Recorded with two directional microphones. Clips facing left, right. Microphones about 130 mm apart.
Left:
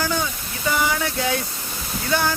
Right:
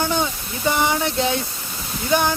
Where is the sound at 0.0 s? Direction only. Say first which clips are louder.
Right 2 dB; 25° right (ahead or behind).